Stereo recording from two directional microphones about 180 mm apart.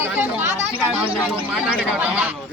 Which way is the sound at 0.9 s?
5° right (ahead or behind).